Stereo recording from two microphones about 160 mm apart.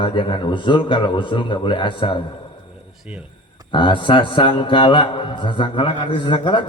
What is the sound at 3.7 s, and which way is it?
Speech, 30° left (ahead or behind).